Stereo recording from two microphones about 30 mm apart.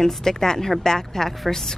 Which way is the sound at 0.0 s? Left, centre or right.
Centre.